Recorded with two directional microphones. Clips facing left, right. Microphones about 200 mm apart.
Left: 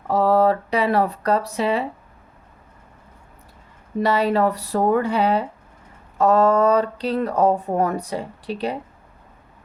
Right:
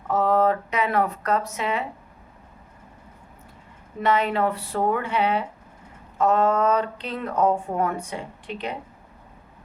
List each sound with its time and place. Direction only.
0.1 s speech: 35° left (ahead or behind)
4.0 s speech: 35° left (ahead or behind)